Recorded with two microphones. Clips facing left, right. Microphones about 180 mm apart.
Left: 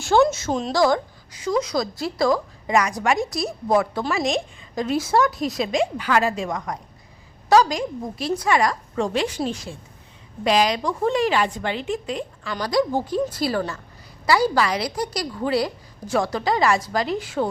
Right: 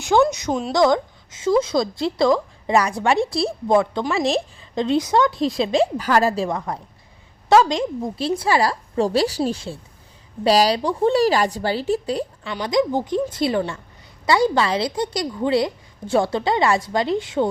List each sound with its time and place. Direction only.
0.3 s a woman's voice: 15° right (ahead or behind); by 4.4 s 35° right (ahead or behind)
4.7 s a woman's voice: 25° right (ahead or behind)
12.5 s a woman's voice: 20° right (ahead or behind)